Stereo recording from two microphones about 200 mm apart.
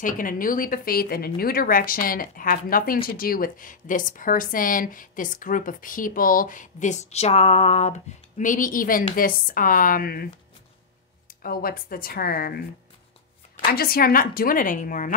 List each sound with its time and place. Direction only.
0.0 s speech: 45° left (ahead or behind)
11.4 s speech: 45° left (ahead or behind)
13.7 s speech: 50° left (ahead or behind)